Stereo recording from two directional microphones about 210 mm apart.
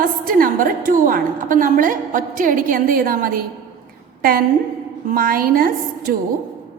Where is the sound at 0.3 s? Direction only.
40° right (ahead or behind).